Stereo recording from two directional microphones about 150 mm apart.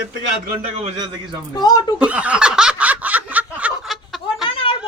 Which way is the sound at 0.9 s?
30° right (ahead or behind).